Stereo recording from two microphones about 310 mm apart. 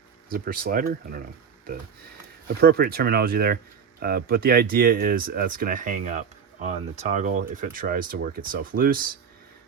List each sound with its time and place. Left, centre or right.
0.3 s speech: right
2.6 s speech: right